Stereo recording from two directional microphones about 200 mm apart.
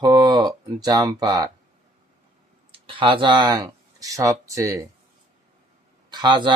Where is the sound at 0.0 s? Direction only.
20° right (ahead or behind).